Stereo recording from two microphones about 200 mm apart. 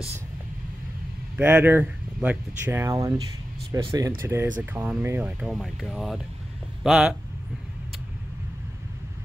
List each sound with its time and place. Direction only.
1.3 s speech: 10° right (ahead or behind)